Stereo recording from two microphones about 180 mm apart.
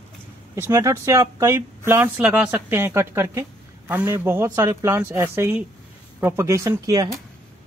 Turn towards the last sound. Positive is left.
turn(degrees=-20)  # may be behind; listen again after turning